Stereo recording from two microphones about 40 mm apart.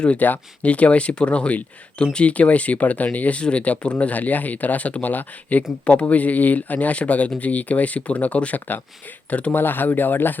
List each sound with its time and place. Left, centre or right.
0.2 s speech: left
9.5 s speech: left